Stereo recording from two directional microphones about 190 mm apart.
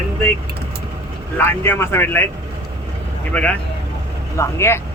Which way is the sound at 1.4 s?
10° left (ahead or behind).